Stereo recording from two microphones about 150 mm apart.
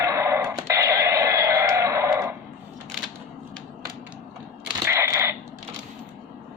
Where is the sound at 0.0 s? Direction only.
20° right (ahead or behind).